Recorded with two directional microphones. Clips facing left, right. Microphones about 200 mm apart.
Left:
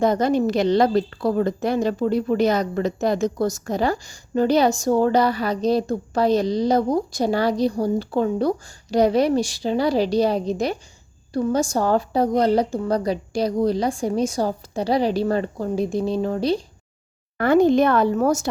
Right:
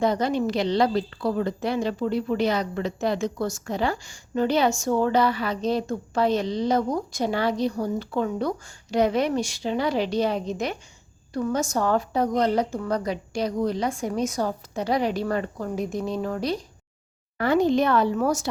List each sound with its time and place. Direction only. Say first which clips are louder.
0.0 s a woman's voice: left 4 dB; 45° left (ahead or behind); by 16.6 s 30° left (ahead or behind)
17.3 s a woman's voice: left 5 dB; 50° left (ahead or behind)